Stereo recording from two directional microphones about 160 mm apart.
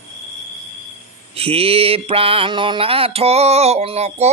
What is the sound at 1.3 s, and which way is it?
Mantra, 35° right (ahead or behind).